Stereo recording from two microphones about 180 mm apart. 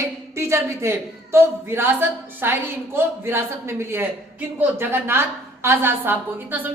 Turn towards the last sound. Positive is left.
turn(degrees=-10)  # may be behind; listen again after turning